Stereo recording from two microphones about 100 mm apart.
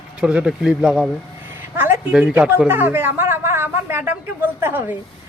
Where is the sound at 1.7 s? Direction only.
20° right (ahead or behind).